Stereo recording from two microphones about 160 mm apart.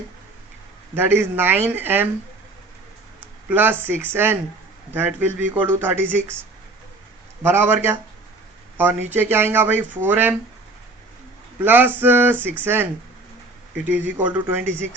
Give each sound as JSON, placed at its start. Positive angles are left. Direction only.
{"t": 0.9, "sound": "speech", "side_deg": -15}
{"t": 3.5, "sound": "speech", "side_deg": -10}
{"t": 7.4, "sound": "speech", "side_deg": -15}
{"t": 11.6, "sound": "speech", "side_deg": -10}